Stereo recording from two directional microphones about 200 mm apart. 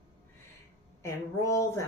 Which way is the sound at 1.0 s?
15° left (ahead or behind).